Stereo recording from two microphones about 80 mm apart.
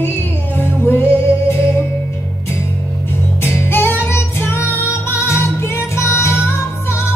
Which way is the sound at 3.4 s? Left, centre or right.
Left.